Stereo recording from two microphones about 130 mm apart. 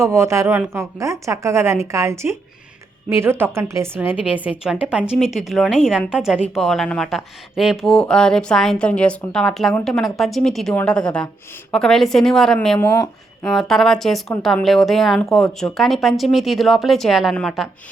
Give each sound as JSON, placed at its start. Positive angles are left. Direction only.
{"t": 0.0, "sound": "a woman's voice", "side_deg": -20}